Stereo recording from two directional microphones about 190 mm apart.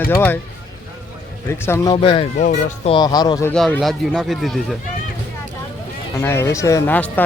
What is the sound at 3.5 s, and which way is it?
Speech, 5° left (ahead or behind).